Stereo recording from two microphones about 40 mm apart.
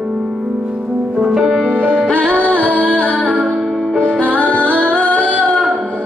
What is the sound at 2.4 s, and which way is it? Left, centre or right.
Music, left.